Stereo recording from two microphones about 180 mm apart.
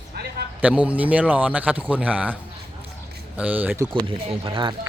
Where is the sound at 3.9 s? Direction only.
30° right (ahead or behind).